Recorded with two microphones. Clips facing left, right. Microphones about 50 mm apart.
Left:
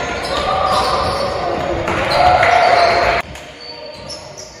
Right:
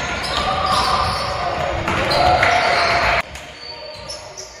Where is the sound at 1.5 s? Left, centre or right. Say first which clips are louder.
Left 3 dB; right.